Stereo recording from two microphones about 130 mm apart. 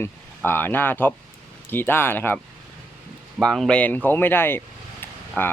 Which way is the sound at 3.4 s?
5° left (ahead or behind).